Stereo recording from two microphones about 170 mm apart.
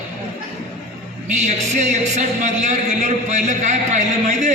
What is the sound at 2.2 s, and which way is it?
A man's voice, 45° right (ahead or behind).